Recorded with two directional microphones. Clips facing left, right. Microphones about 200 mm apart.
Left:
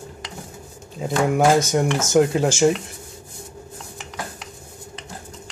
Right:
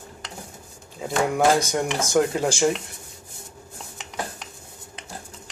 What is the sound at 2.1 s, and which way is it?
Speech, 20° left (ahead or behind).